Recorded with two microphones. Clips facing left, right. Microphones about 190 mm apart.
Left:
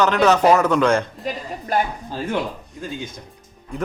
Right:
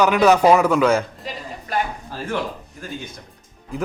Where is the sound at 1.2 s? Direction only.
50° left (ahead or behind).